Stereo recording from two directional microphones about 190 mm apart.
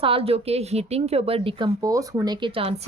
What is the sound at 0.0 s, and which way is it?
Speech, 30° right (ahead or behind).